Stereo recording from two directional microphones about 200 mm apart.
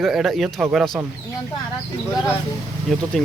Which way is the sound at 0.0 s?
Centre (ahead or behind).